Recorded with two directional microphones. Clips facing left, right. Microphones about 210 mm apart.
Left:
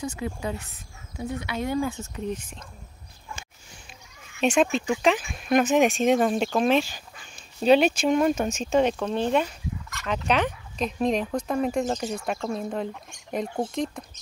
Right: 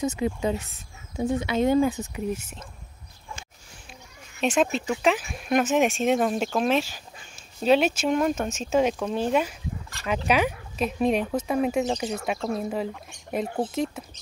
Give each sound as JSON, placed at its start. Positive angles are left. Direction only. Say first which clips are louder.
{"t": 0.0, "sound": "speech", "louder": "right 5 dB", "side_deg": -25}
{"t": 4.4, "sound": "speech", "louder": "left 2 dB", "side_deg": 0}